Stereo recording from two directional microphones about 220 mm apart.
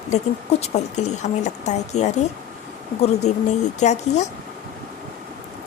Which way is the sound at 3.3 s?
30° left (ahead or behind).